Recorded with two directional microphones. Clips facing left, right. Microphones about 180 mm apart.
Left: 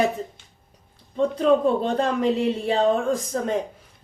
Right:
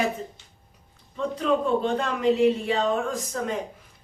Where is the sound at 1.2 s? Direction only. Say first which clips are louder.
Left 5 dB; 35° left (ahead or behind).